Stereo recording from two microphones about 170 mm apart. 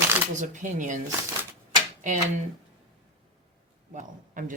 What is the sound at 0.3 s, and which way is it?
Speech, 45° right (ahead or behind).